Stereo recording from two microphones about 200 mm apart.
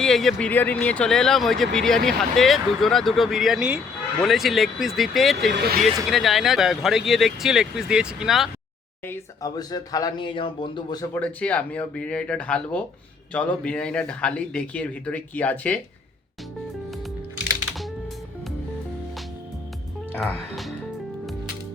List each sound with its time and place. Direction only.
0.0 s speech: centre (ahead or behind)
5.5 s speech: 55° right (ahead or behind)
6.1 s speech: centre (ahead or behind)
9.0 s speech: 15° left (ahead or behind)
20.1 s speech: centre (ahead or behind)